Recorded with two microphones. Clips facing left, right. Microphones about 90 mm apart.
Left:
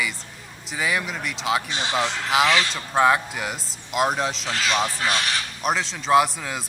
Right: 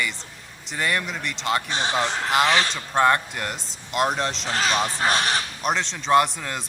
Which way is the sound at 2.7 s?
5° left (ahead or behind).